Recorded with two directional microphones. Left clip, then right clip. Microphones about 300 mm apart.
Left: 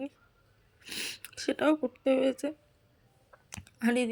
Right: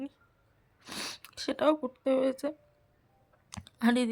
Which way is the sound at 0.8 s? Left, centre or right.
Centre.